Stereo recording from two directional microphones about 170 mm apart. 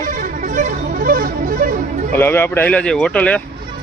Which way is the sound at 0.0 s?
45° right (ahead or behind).